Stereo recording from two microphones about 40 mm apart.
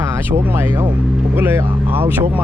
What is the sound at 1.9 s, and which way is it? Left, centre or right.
Speech, right.